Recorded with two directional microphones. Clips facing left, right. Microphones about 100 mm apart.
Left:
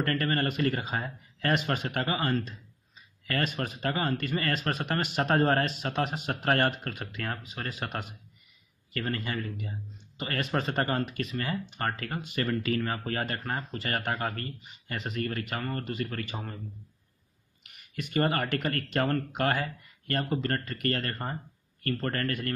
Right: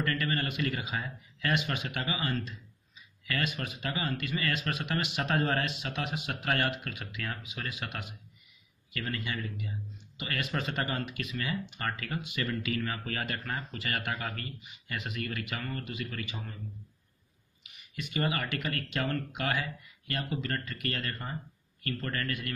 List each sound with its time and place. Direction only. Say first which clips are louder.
0.0 s speech: left 4 dB; 40° left (ahead or behind)
17.6 s a sound: left 4 dB; 50° left (ahead or behind)
18.1 s speech: left 5 dB; 45° left (ahead or behind)